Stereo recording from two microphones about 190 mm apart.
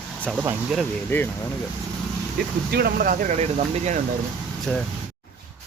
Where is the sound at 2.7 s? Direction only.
55° right (ahead or behind); by 3.9 s 35° right (ahead or behind).